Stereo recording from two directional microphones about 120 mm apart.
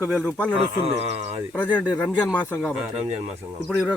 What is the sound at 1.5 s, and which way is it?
Speech, 15° left (ahead or behind).